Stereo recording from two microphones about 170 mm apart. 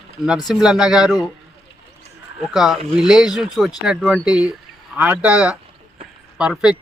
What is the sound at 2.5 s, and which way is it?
Speech, 5° right (ahead or behind).